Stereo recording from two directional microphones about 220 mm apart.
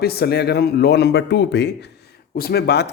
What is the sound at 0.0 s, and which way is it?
Speech, 45° left (ahead or behind).